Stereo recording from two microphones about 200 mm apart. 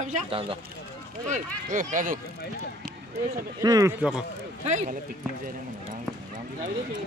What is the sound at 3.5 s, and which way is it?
Speech, 15° right (ahead or behind).